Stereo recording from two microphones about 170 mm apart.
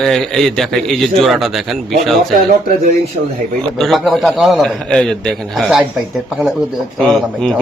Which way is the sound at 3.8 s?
Centre (ahead or behind).